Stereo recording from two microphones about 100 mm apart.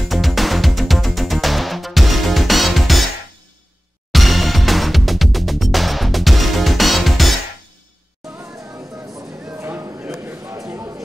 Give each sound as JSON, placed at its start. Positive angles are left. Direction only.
{"t": 0.1, "sound": "music", "side_deg": 0}
{"t": 4.1, "sound": "music", "side_deg": 0}
{"t": 8.4, "sound": "music", "side_deg": -30}
{"t": 9.5, "sound": "a sound", "side_deg": -20}